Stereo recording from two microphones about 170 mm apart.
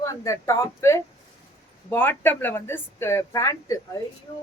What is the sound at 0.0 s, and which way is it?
A woman's voice, 20° left (ahead or behind).